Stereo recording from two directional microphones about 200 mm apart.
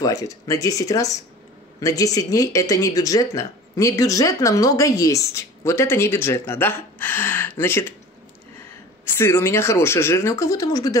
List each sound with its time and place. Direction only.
0.0 s speech: 15° left (ahead or behind)
9.0 s speech: 10° left (ahead or behind)